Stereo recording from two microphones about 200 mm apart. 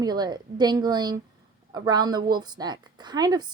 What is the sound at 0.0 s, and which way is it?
A woman's voice, 20° right (ahead or behind).